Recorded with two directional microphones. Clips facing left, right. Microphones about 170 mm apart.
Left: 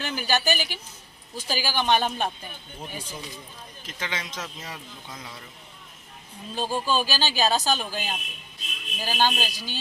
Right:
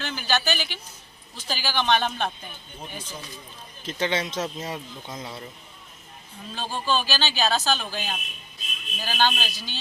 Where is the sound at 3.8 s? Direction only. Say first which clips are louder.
Right 8 dB; 30° right (ahead or behind).